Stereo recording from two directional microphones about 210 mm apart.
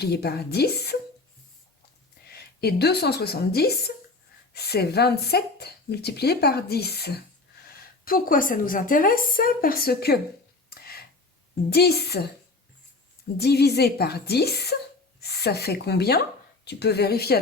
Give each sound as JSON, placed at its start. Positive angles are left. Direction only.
{"t": 0.0, "sound": "speech", "side_deg": 50}
{"t": 2.2, "sound": "a woman's voice", "side_deg": 50}
{"t": 10.8, "sound": "a sound", "side_deg": 45}
{"t": 11.7, "sound": "speech", "side_deg": 50}
{"t": 13.3, "sound": "speech", "side_deg": 50}